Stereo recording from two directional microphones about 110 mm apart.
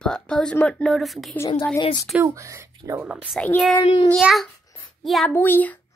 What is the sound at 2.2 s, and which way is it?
Speech, 30° right (ahead or behind).